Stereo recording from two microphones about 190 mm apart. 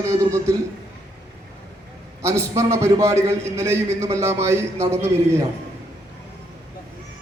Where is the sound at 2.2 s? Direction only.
15° right (ahead or behind).